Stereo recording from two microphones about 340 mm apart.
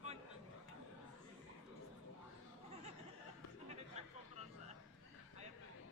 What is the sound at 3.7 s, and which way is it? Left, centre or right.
Chatter, centre.